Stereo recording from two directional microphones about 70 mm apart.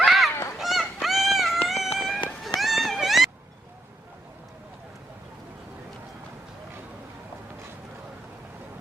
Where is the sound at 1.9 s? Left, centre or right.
Centre.